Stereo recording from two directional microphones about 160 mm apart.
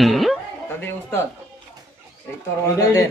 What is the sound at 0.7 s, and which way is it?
Speech, 15° left (ahead or behind).